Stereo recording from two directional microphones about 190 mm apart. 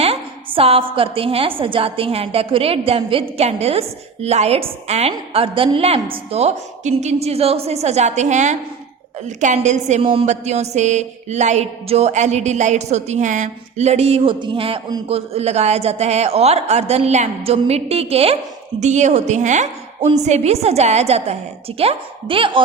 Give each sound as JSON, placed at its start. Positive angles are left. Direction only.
{"t": 0.0, "sound": "a woman's voice", "side_deg": -30}